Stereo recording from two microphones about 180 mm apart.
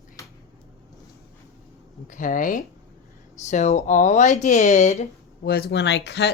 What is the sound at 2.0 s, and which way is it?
Speech, 45° left (ahead or behind).